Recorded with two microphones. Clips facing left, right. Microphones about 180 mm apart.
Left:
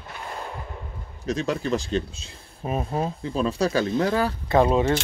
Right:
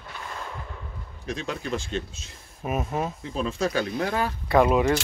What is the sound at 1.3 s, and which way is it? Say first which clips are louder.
Speech: left 5 dB; 40° left (ahead or behind).